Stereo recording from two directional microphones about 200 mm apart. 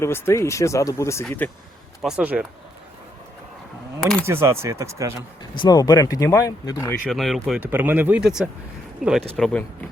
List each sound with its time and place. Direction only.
0.0 s speech: 15° left (ahead or behind)
2.0 s speech: 5° right (ahead or behind)
4.3 s speech: 10° right (ahead or behind)
5.4 s speech: 20° left (ahead or behind)
7.0 s speech: centre (ahead or behind)